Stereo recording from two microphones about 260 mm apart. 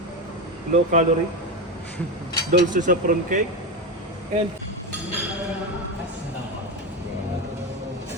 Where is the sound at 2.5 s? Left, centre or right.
Right.